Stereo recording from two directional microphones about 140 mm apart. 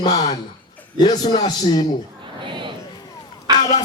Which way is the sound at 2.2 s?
35° right (ahead or behind).